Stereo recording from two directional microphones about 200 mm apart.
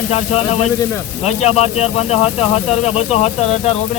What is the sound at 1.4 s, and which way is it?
Speech, 30° left (ahead or behind).